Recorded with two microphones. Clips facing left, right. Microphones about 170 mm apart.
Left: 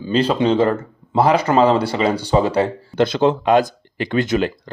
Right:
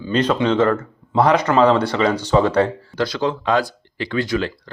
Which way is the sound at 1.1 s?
5° left (ahead or behind).